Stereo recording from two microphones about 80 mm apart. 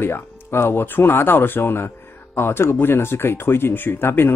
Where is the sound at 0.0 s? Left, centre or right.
Left.